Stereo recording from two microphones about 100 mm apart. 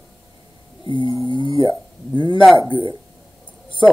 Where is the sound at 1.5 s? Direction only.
35° right (ahead or behind).